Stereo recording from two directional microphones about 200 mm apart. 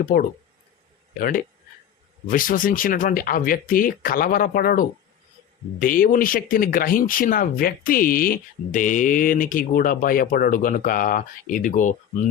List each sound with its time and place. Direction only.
0.0 s speech: 45° left (ahead or behind)
2.2 s speech: 40° left (ahead or behind)